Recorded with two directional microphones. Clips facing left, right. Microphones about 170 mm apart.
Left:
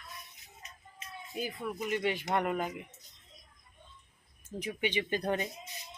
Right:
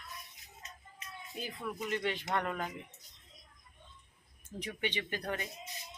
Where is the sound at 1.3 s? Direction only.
10° left (ahead or behind).